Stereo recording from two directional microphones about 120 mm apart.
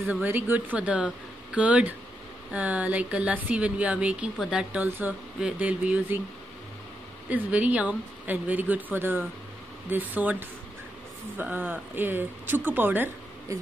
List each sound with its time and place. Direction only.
0.1 s speech: 15° right (ahead or behind)
4.8 s speech: 15° right (ahead or behind)
7.2 s speech: 10° right (ahead or behind)
11.3 s speech: 15° right (ahead or behind)